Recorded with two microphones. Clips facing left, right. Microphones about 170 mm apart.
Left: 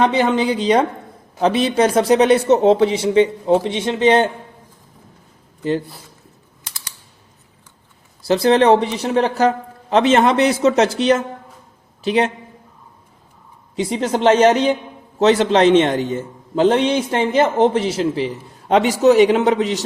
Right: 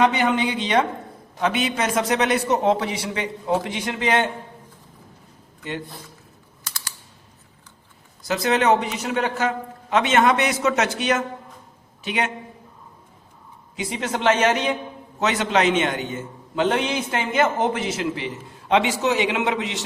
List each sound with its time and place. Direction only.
0.0 s a man's voice: 30° left (ahead or behind)
8.2 s a man's voice: 30° left (ahead or behind)
13.7 s a man's voice: 30° left (ahead or behind)